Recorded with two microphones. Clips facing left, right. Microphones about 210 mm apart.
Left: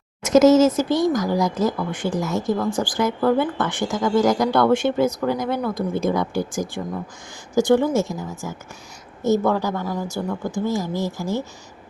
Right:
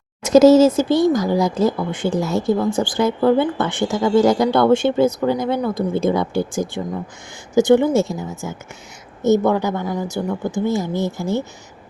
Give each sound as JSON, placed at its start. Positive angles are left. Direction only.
{"t": 0.2, "sound": "speech", "side_deg": -35}